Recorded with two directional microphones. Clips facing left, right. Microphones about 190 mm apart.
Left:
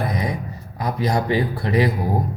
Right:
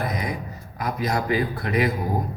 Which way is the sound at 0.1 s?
30° left (ahead or behind).